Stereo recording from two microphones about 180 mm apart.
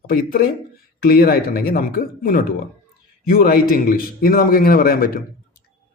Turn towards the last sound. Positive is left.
turn(degrees=55)  # may be behind; listen again after turning